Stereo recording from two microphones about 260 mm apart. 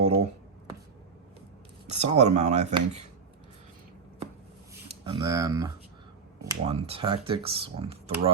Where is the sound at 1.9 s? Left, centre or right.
Right.